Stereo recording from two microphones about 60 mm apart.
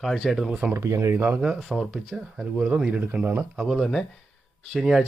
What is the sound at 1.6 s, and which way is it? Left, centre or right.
Speech, centre.